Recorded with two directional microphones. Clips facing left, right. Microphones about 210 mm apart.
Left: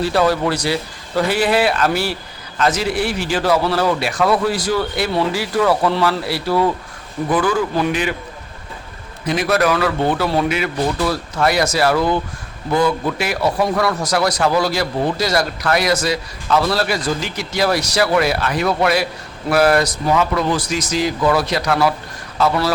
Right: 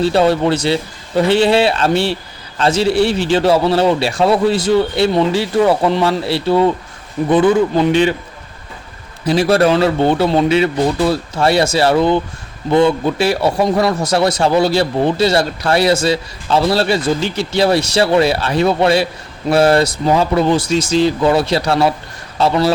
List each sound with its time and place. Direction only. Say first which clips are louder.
0.0 s a man's voice: right 4 dB; 25° right (ahead or behind)
9.2 s a man's voice: right 5 dB; 30° right (ahead or behind)